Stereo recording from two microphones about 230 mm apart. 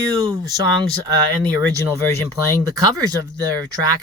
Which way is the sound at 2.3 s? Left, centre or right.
Centre.